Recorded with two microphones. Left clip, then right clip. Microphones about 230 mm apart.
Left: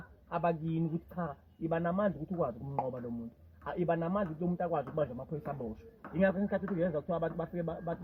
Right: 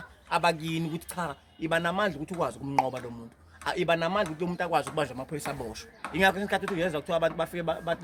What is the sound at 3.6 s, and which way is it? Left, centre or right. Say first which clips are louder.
A man's voice: right 7 dB; right.